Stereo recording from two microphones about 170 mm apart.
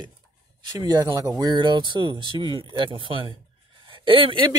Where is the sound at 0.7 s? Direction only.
25° right (ahead or behind).